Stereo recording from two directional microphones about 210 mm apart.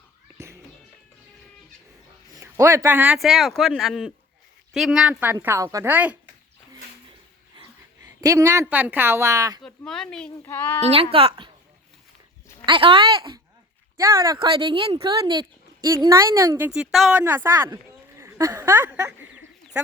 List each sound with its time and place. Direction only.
0.3 s music: 15° right (ahead or behind)
2.3 s speech: 15° right (ahead or behind)
8.0 s speech: 15° right (ahead or behind)
9.6 s speech: centre (ahead or behind)
10.8 s speech: 30° right (ahead or behind)
12.6 s speech: 25° right (ahead or behind)
18.2 s a sound: 15° right (ahead or behind)